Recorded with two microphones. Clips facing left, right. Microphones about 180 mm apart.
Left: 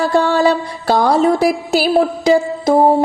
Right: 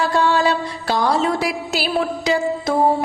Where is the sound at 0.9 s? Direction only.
50° left (ahead or behind).